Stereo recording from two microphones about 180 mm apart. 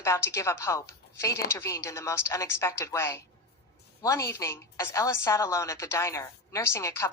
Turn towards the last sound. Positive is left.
turn(degrees=15)  # may be behind; listen again after turning